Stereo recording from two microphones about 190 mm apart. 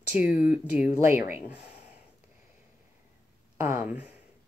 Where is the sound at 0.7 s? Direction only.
10° right (ahead or behind).